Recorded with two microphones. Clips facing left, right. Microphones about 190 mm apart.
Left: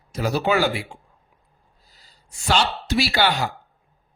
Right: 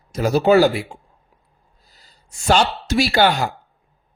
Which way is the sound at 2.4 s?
45° right (ahead or behind).